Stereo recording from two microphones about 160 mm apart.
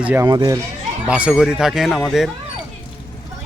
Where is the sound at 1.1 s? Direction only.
5° right (ahead or behind).